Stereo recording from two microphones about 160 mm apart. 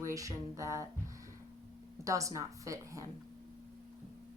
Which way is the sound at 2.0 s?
20° right (ahead or behind).